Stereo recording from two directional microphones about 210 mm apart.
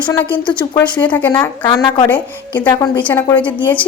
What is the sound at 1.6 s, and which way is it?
Speech, 20° left (ahead or behind).